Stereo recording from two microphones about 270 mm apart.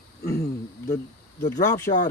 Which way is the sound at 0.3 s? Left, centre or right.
Left.